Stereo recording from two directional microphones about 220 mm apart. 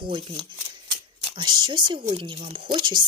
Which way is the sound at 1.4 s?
20° right (ahead or behind).